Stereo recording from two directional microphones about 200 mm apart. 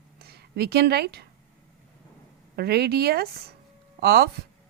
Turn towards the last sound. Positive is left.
turn(degrees=-50)  # may be behind; listen again after turning